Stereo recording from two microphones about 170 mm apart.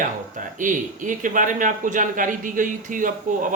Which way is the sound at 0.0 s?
50° right (ahead or behind).